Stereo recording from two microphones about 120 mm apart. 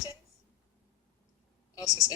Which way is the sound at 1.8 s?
30° left (ahead or behind).